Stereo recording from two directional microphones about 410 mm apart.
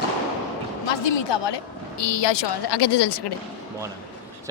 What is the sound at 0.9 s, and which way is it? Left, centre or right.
A woman's voice, left.